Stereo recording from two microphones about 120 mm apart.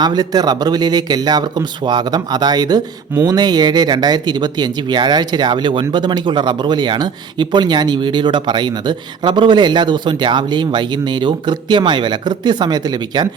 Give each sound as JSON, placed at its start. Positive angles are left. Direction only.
{"t": 0.0, "sound": "speech", "side_deg": -35}